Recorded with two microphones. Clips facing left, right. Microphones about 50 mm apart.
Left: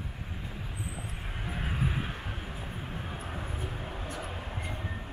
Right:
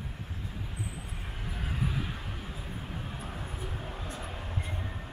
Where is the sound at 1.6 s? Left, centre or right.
Left.